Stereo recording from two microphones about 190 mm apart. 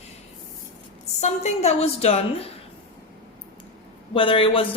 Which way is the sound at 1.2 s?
35° left (ahead or behind).